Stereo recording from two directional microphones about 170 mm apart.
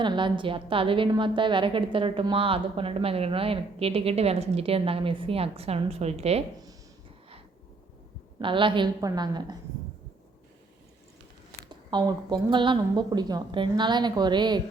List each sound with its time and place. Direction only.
0.0 s a woman's voice: 30° right (ahead or behind)
8.4 s speech: 30° right (ahead or behind)
11.7 s speech: 25° right (ahead or behind)